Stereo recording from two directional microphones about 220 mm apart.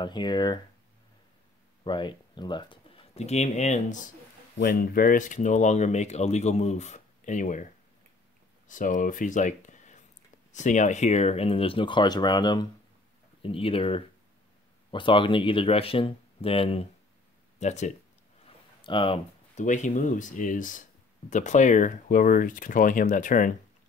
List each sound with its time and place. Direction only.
0.0 s speech: 20° left (ahead or behind)
1.9 s speech: 20° left (ahead or behind)
4.6 s speech: 40° left (ahead or behind); by 19.6 s 25° left (ahead or behind)
19.6 s speech: 35° left (ahead or behind)